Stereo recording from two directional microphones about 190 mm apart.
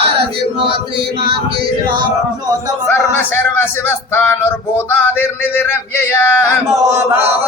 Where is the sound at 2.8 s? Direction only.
10° left (ahead or behind).